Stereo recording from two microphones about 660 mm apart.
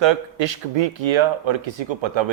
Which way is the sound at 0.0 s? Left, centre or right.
Right.